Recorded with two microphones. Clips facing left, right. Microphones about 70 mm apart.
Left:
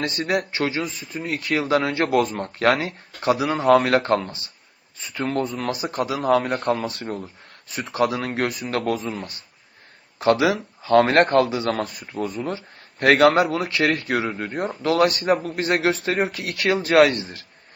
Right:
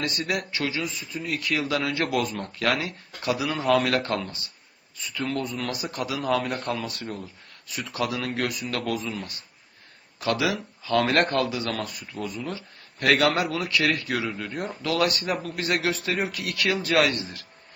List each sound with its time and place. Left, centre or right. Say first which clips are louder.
0.0 s speech: left 5 dB; left
9.0 s speech: left 3 dB; left
10.2 s speech: left 7 dB; left
12.0 s speech: left 5 dB; left
12.5 s speech: left 5 dB; left
14.8 s speech: left 6 dB; left